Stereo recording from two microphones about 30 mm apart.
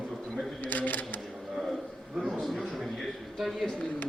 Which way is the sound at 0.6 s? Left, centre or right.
Left.